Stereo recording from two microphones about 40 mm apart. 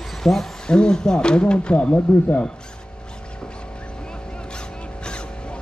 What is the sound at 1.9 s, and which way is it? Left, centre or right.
Speech, left.